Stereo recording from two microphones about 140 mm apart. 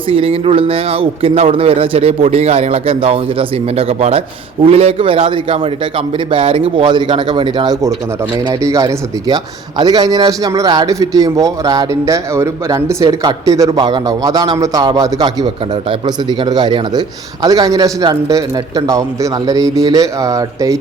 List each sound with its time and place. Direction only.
0.1 s a man's voice: 40° right (ahead or behind); by 20.7 s 25° right (ahead or behind)